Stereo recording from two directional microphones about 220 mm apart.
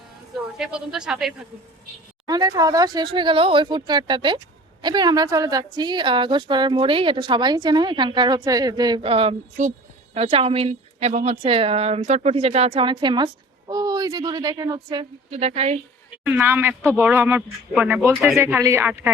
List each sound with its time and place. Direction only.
0.5 s a man's voice: 5° right (ahead or behind)
2.2 s a woman's voice: 15° right (ahead or behind)
15.3 s a woman's voice: 30° right (ahead or behind)
16.2 s speech: 10° right (ahead or behind)